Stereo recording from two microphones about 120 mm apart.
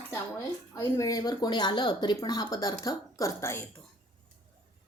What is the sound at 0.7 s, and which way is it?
A woman's voice, 25° left (ahead or behind).